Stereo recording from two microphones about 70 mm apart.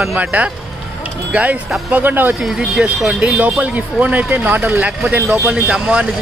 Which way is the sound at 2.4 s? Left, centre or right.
Centre.